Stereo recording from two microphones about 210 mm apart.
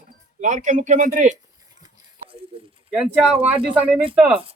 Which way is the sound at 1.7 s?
20° right (ahead or behind).